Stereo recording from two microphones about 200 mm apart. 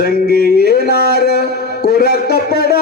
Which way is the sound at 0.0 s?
50° left (ahead or behind).